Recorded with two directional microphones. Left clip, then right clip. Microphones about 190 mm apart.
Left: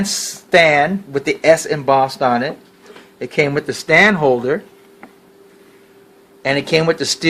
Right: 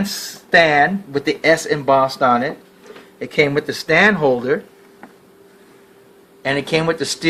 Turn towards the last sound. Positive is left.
turn(degrees=45)  # may be behind; listen again after turning